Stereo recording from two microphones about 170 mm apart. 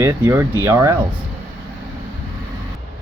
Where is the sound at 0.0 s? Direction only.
15° right (ahead or behind).